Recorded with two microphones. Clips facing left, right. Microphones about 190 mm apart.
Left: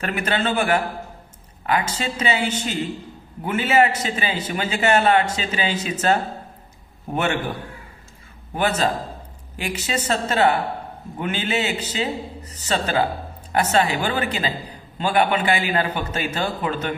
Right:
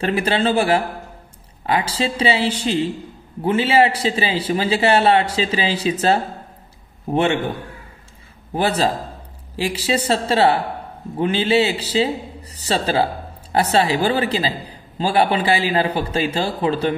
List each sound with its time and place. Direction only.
0.0 s a man's voice: 30° right (ahead or behind)
8.5 s a man's voice: 35° right (ahead or behind)